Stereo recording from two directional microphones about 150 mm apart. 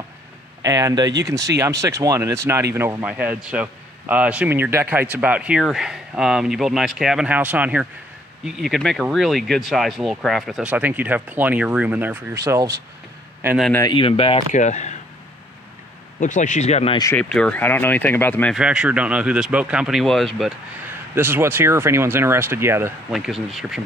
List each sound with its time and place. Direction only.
0.6 s speech: 25° right (ahead or behind)
13.8 s speech: 35° left (ahead or behind)
14.5 s speech: 50° left (ahead or behind)
16.2 s speech: 55° left (ahead or behind)
17.1 s speech: 5° left (ahead or behind)
18.6 s speech: 5° right (ahead or behind)
21.1 s speech: 15° right (ahead or behind)
23.1 s speech: centre (ahead or behind)